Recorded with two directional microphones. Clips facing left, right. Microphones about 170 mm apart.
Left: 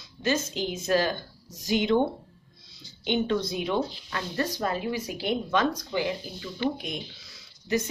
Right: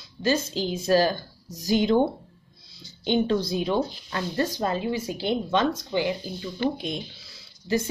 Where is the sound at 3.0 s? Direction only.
35° right (ahead or behind).